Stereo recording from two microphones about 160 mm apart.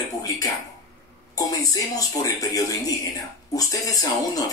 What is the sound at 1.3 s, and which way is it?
Speech, 20° left (ahead or behind).